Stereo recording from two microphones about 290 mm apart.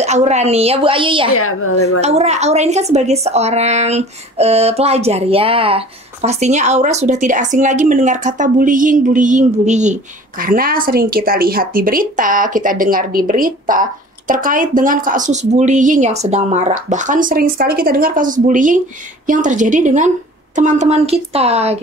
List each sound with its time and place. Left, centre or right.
0.0 s speech: right
1.3 s a woman's voice: left
2.0 s speech: right